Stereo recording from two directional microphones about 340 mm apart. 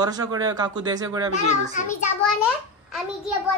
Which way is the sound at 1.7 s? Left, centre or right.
Left.